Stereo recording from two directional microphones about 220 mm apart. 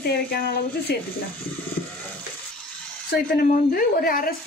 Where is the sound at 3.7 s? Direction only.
40° left (ahead or behind).